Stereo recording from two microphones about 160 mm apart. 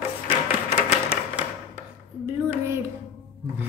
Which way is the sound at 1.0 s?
10° right (ahead or behind).